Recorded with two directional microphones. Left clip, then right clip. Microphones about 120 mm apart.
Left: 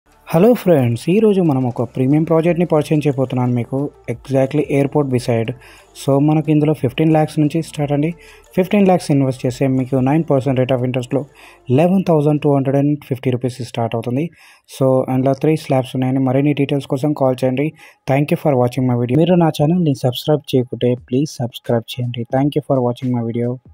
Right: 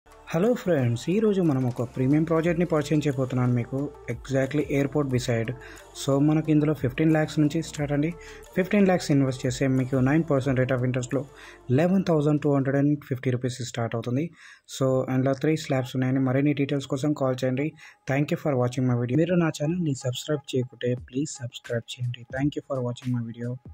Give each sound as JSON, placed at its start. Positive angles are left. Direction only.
{"t": 0.3, "sound": "speech", "side_deg": 55}
{"t": 2.2, "sound": "speech", "side_deg": 35}
{"t": 4.0, "sound": "speech", "side_deg": 40}